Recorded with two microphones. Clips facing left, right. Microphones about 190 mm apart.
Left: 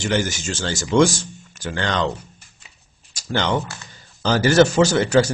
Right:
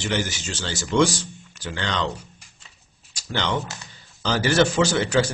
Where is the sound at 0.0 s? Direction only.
45° left (ahead or behind).